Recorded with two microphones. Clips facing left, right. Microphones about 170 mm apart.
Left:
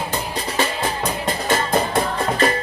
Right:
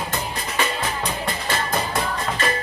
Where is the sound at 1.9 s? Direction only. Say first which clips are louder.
Left 4 dB; 35° left (ahead or behind).